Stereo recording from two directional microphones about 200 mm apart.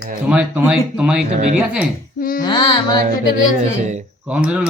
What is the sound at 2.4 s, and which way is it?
Speech, 20° left (ahead or behind).